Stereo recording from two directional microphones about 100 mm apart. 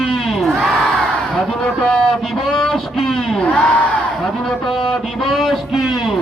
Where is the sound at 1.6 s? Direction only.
10° left (ahead or behind).